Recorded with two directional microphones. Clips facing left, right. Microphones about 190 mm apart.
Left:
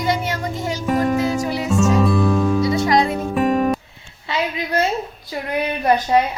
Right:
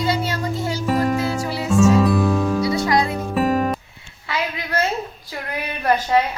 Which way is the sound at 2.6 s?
20° left (ahead or behind).